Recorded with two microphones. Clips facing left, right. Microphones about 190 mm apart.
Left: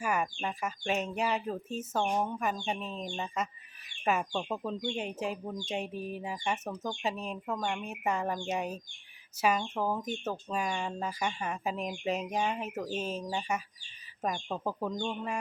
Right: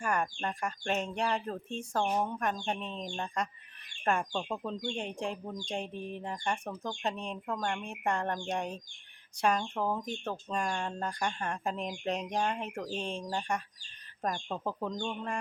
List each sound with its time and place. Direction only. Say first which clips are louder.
0.0 s speech: even; 5° left (ahead or behind)